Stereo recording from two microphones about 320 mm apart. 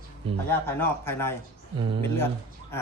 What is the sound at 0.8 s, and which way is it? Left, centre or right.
Speech, centre.